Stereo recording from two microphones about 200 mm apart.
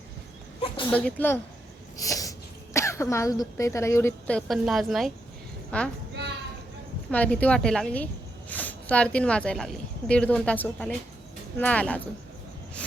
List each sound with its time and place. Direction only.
0.9 s a woman's voice: 10° left (ahead or behind)
2.0 s sneeze: 15° left (ahead or behind)
2.7 s a woman's voice: 15° left (ahead or behind)
7.1 s a woman's voice: 5° left (ahead or behind)